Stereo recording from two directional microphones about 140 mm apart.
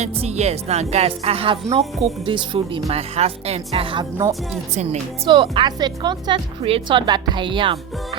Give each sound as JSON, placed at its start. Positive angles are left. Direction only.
{"t": 0.0, "sound": "speech", "side_deg": -50}
{"t": 1.8, "sound": "speech", "side_deg": 0}
{"t": 2.2, "sound": "speech", "side_deg": -35}
{"t": 2.9, "sound": "speech", "side_deg": -45}
{"t": 4.7, "sound": "speech", "side_deg": -50}
{"t": 5.3, "sound": "speech", "side_deg": -35}